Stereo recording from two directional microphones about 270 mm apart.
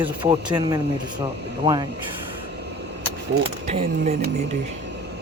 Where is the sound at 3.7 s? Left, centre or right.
Right.